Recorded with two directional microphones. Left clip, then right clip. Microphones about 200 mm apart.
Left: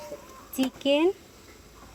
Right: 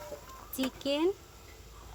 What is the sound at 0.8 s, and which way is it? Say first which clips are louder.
Speech: left 8 dB; centre (ahead or behind).